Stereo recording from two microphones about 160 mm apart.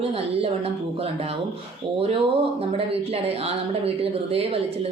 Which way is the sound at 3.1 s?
40° right (ahead or behind).